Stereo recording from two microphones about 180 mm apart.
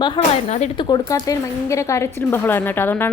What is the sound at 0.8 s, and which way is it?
A woman's voice, 25° left (ahead or behind).